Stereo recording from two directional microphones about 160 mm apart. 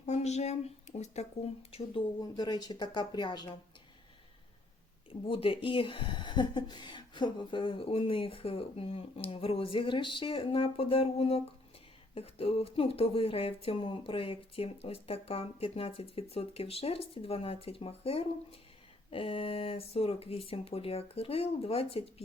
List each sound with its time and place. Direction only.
0.0 s speech: 45° left (ahead or behind)
2.2 s speech: 25° left (ahead or behind)
5.2 s speech: 35° left (ahead or behind)